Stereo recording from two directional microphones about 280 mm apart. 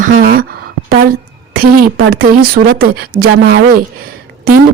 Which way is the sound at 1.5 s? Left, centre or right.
Right.